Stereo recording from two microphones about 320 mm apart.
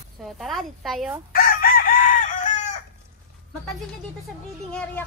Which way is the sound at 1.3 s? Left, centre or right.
Left.